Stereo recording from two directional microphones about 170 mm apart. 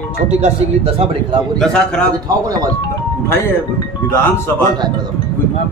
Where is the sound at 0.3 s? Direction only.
35° right (ahead or behind).